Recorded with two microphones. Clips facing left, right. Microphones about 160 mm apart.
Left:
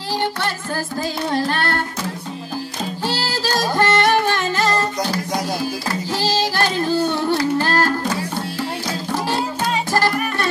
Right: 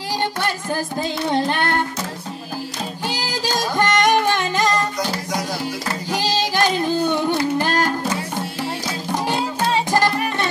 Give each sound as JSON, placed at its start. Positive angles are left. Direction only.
{"t": 0.4, "sound": "music", "side_deg": -20}
{"t": 3.1, "sound": "music", "side_deg": -15}
{"t": 6.1, "sound": "music", "side_deg": -15}
{"t": 9.8, "sound": "music", "side_deg": -20}